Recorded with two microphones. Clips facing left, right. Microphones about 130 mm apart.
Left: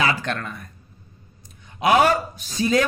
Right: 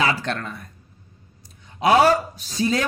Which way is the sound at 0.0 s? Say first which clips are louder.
Even; 30° right (ahead or behind).